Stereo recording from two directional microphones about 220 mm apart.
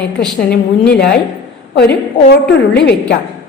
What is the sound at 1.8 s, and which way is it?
A woman's voice, 50° left (ahead or behind).